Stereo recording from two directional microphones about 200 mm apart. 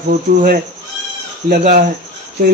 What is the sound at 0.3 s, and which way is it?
A man's voice, 40° right (ahead or behind).